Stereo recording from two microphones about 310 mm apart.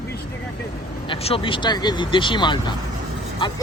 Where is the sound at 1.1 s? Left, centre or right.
Centre.